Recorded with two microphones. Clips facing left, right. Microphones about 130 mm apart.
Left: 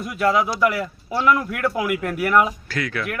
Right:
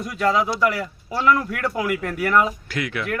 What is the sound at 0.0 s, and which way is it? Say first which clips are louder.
Speech: left 1 dB; 10° left (ahead or behind).